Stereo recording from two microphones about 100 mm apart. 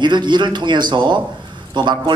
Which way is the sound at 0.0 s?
50° right (ahead or behind).